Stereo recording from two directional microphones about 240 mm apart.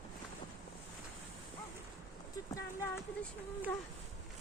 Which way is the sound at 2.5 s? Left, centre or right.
Centre.